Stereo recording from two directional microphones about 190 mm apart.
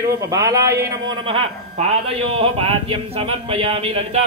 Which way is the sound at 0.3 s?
15° right (ahead or behind).